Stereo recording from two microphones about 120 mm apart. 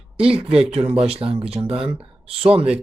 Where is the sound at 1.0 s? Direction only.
55° right (ahead or behind).